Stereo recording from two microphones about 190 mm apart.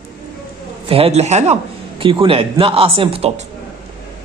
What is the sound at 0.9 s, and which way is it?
A man's voice, 30° right (ahead or behind).